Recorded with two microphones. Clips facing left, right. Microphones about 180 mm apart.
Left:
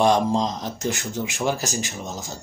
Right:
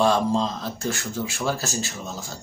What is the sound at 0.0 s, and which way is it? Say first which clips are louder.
A man's voice: left 1 dB; 15° left (ahead or behind).